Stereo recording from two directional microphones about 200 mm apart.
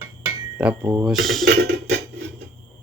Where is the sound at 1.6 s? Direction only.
55° right (ahead or behind).